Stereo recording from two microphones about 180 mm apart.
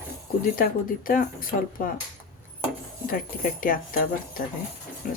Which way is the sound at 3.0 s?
50° left (ahead or behind).